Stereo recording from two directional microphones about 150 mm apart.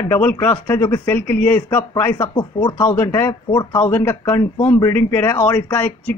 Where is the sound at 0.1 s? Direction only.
10° left (ahead or behind).